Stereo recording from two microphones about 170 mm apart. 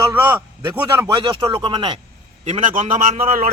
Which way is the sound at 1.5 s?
30° right (ahead or behind).